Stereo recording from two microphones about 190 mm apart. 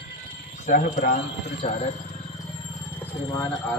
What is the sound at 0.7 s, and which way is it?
Speech, 40° left (ahead or behind).